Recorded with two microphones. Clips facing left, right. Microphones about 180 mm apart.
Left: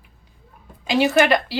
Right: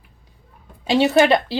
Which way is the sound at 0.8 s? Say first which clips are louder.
Right 2 dB; 30° right (ahead or behind).